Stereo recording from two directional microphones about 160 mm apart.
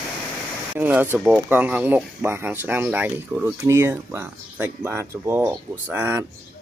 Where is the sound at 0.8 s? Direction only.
10° right (ahead or behind).